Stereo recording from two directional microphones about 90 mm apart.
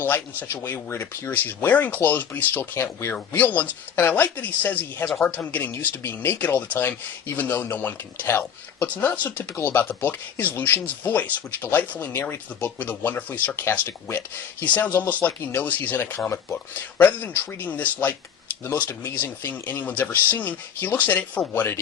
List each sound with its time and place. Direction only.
0.0 s speech: 20° left (ahead or behind)
19.0 s speech: 20° left (ahead or behind)